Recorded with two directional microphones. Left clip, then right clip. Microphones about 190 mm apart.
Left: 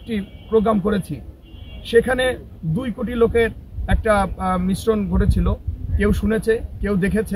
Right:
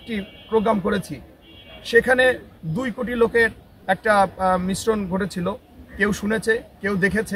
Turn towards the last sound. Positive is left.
turn(degrees=0)  # may be behind; listen again after turning